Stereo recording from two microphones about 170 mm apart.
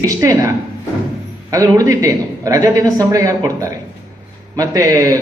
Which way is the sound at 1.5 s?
20° right (ahead or behind).